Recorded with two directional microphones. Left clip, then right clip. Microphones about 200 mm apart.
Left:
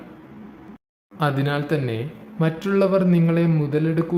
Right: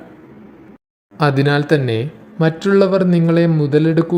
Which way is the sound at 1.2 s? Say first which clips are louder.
Right 8 dB; 30° right (ahead or behind).